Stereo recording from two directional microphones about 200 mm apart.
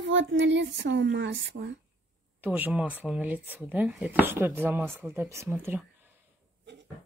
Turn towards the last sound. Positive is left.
turn(degrees=-10)  # may be behind; listen again after turning